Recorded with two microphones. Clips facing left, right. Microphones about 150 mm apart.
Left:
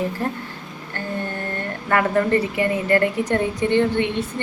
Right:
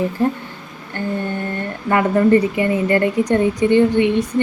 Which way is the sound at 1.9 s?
15° right (ahead or behind).